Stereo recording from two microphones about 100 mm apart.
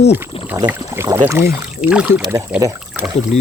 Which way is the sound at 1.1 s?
25° right (ahead or behind).